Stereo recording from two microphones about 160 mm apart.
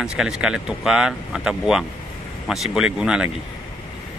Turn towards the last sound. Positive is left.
turn(degrees=-5)  # may be behind; listen again after turning